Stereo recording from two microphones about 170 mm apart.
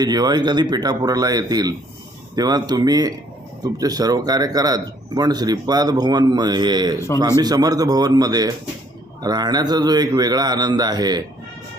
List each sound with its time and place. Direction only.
0.0 s speech: 25° right (ahead or behind)